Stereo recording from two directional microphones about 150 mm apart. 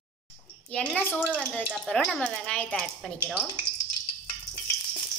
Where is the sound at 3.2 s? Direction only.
10° right (ahead or behind).